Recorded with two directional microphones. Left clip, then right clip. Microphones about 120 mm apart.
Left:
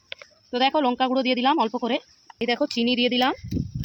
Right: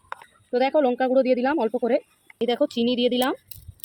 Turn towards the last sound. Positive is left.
turn(degrees=50)  # may be behind; listen again after turning